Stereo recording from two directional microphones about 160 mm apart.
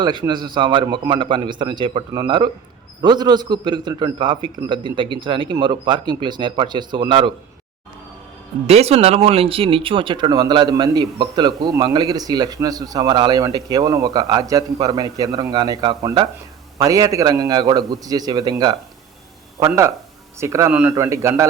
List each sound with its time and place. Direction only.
0.0 s speech: 30° right (ahead or behind)
8.6 s speech: 40° right (ahead or behind); by 21.4 s 20° right (ahead or behind)